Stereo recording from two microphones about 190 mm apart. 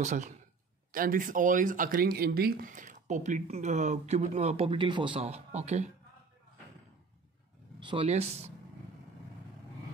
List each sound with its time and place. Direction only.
0.0 s speech: 40° right (ahead or behind)
7.8 s speech: 25° right (ahead or behind)